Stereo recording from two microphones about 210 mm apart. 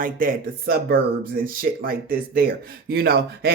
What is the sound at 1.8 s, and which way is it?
Speech, 45° right (ahead or behind).